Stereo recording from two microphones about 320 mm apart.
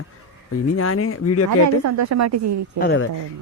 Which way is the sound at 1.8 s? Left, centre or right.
Right.